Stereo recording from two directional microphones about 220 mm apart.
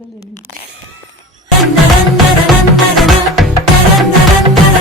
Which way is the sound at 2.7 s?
Centre (ahead or behind).